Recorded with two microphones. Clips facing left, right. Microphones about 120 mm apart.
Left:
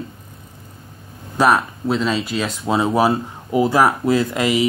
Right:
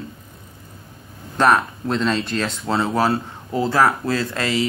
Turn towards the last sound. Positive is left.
turn(degrees=15)  # may be behind; listen again after turning